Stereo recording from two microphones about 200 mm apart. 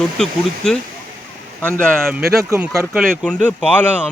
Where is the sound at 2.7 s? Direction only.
Centre (ahead or behind).